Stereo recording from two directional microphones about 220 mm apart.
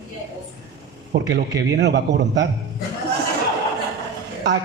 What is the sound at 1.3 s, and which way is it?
A man's voice, 50° right (ahead or behind).